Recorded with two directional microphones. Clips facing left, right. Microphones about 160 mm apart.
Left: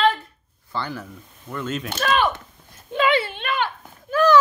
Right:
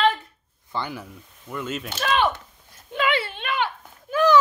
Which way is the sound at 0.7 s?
15° right (ahead or behind).